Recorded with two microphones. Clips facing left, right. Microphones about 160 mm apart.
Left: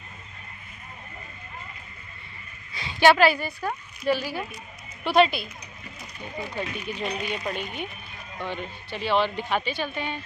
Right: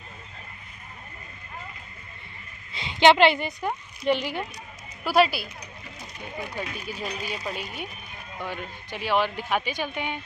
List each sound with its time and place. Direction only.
2.7 s a woman's voice: 20° right (ahead or behind)
5.0 s speech: 5° right (ahead or behind)
6.5 s speech: 5° right (ahead or behind)